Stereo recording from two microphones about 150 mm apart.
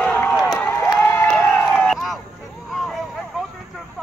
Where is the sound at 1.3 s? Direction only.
10° left (ahead or behind).